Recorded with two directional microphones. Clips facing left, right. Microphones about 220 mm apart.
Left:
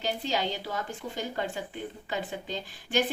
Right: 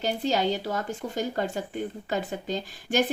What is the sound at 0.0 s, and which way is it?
A woman's voice, 45° right (ahead or behind).